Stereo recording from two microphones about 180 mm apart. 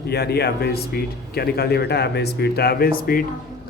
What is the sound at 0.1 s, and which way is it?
Speech, 65° left (ahead or behind).